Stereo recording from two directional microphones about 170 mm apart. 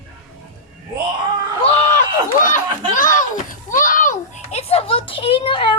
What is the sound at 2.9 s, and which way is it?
Children playing, 50° left (ahead or behind).